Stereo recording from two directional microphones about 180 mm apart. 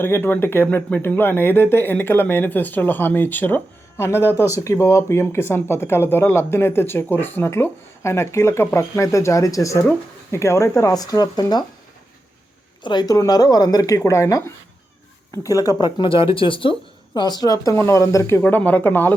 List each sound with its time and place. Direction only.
0.0 s speech: 10° left (ahead or behind)
4.3 s speech: 15° right (ahead or behind)
4.5 s speech: 15° left (ahead or behind)
12.8 s speech: 25° left (ahead or behind)